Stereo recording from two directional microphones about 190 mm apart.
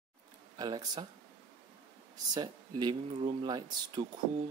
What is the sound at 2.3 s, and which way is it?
Speech, 25° right (ahead or behind).